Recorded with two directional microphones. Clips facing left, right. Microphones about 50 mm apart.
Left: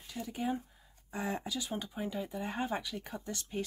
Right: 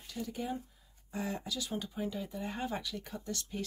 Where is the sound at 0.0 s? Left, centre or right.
Centre.